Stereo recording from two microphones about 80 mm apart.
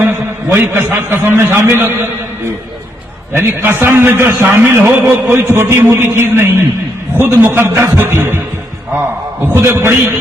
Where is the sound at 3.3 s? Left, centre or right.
Right.